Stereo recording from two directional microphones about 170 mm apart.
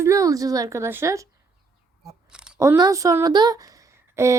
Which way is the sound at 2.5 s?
20° right (ahead or behind).